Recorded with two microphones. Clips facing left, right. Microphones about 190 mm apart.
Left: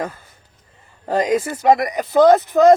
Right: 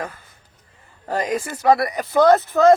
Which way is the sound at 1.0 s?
20° left (ahead or behind).